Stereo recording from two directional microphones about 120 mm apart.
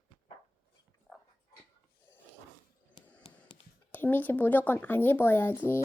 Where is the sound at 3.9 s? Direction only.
15° left (ahead or behind).